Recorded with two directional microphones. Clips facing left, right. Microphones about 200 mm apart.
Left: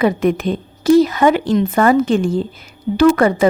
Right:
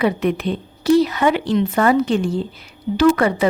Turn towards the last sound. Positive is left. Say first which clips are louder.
# left 3 dB
turn(degrees=45)  # may be behind; listen again after turning